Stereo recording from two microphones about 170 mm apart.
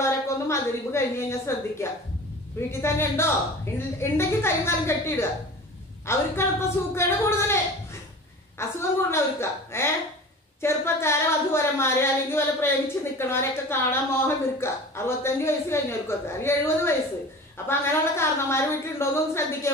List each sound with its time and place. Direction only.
0.0 s a woman's voice: 15° left (ahead or behind)